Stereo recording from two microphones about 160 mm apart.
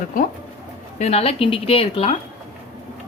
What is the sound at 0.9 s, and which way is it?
A woman's voice, 40° left (ahead or behind).